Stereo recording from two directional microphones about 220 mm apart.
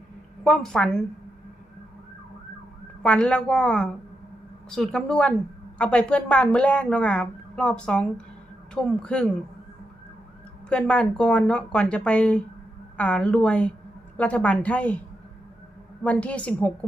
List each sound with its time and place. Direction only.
0.4 s speech: 5° left (ahead or behind)
3.0 s speech: 5° left (ahead or behind)
10.7 s speech: 5° left (ahead or behind)
16.0 s a woman's voice: 5° left (ahead or behind)